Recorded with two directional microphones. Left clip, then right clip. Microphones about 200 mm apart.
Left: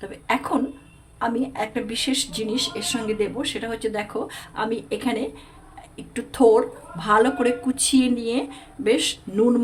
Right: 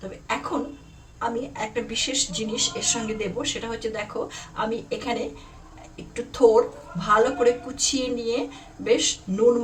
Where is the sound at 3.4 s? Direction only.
55° left (ahead or behind).